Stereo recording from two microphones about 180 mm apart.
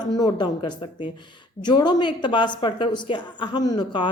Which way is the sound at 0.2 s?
25° left (ahead or behind).